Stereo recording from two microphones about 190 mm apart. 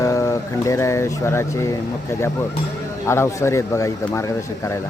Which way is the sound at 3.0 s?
15° left (ahead or behind).